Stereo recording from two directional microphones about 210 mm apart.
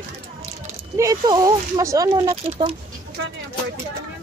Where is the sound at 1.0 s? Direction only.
15° right (ahead or behind).